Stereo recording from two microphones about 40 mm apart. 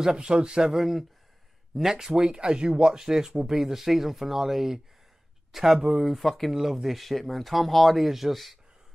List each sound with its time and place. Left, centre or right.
0.0 s speech: right
2.2 s speech: right
6.1 s speech: centre
6.5 s speech: centre